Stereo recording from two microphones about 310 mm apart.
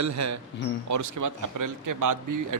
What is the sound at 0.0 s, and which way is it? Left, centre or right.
A man's voice, right.